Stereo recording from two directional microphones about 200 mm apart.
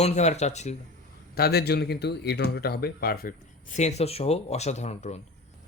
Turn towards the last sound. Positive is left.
turn(degrees=35)  # may be behind; listen again after turning